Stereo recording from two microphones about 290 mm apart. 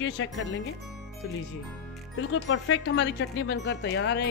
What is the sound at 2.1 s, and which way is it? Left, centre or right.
Speech, left.